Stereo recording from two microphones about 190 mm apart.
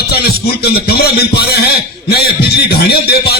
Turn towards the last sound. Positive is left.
turn(degrees=55)  # may be behind; listen again after turning